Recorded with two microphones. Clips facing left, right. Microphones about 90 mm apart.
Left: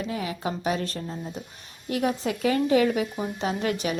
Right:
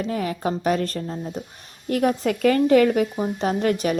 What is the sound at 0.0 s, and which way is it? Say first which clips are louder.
Speech: right 5 dB; 45° right (ahead or behind).